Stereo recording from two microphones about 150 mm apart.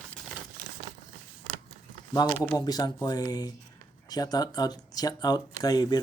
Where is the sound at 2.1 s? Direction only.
25° left (ahead or behind).